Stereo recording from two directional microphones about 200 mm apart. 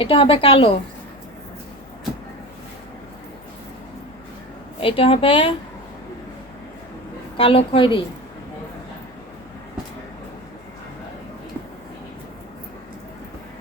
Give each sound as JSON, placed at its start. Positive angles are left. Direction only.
{"t": 0.0, "sound": "a woman's voice", "side_deg": 25}
{"t": 4.8, "sound": "a woman's voice", "side_deg": 30}
{"t": 7.3, "sound": "a woman's voice", "side_deg": 30}